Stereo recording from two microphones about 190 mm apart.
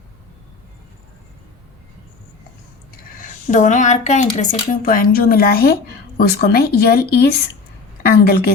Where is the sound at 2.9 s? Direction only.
45° left (ahead or behind).